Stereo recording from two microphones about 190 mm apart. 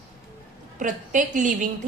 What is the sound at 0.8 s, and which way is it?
Speech, 40° right (ahead or behind).